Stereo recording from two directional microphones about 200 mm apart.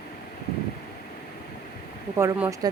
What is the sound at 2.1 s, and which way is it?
Speech, 10° right (ahead or behind).